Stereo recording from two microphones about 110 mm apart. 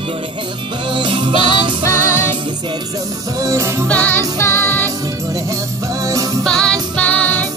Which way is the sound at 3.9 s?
15° left (ahead or behind).